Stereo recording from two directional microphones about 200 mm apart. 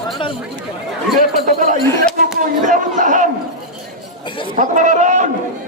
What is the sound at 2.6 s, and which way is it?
Speech, 40° right (ahead or behind).